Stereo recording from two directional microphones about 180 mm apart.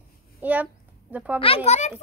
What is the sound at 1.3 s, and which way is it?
Speech, 30° left (ahead or behind).